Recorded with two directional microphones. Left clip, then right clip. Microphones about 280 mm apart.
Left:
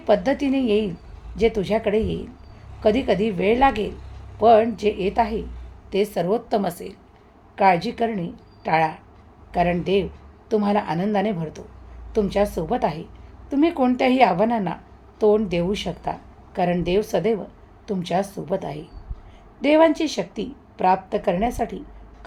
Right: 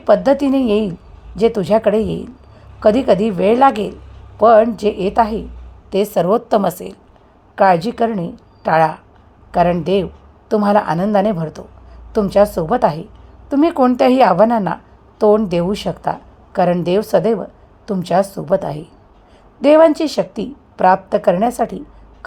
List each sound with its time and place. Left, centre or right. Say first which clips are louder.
0.0 s speech: right 7 dB; right